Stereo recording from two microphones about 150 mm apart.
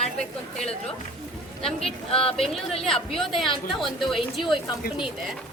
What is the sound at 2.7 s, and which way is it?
Speech, 40° left (ahead or behind).